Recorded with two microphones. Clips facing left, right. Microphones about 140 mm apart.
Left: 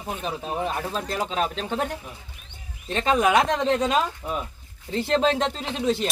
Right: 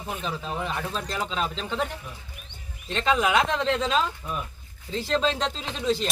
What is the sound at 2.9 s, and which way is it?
Speech, 50° left (ahead or behind).